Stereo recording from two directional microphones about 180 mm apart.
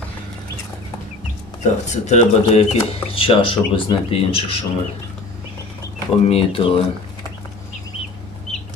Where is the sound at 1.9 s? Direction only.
40° left (ahead or behind).